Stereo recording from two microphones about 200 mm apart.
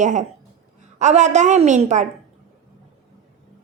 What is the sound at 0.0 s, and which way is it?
A woman's voice, 40° right (ahead or behind).